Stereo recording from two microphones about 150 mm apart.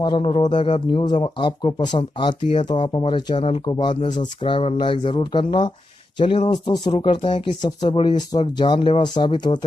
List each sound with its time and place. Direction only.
0.0 s speech: 35° left (ahead or behind)